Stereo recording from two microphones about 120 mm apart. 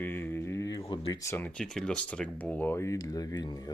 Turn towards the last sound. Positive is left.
turn(degrees=35)  # may be behind; listen again after turning